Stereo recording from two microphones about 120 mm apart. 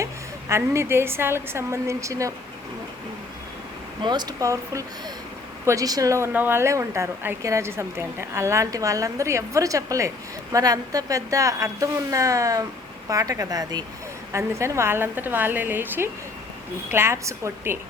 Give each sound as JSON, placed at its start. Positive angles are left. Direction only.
{"t": 0.0, "sound": "a woman's voice", "side_deg": -25}
{"t": 4.0, "sound": "a woman's voice", "side_deg": -35}
{"t": 14.3, "sound": "a woman's voice", "side_deg": -25}